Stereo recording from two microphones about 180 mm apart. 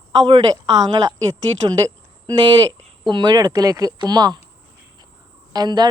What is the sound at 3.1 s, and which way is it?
A woman's voice, 25° right (ahead or behind).